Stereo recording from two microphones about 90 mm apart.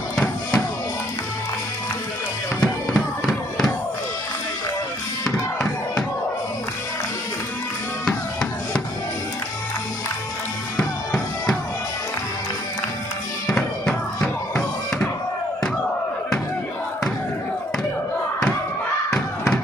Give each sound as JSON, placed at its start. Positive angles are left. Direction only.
{"t": 2.6, "sound": "music", "side_deg": 5}
{"t": 5.2, "sound": "music", "side_deg": 10}
{"t": 13.5, "sound": "music", "side_deg": 5}